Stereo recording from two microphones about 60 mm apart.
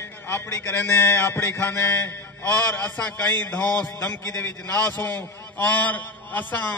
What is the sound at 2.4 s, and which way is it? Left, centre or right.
A man's voice, left.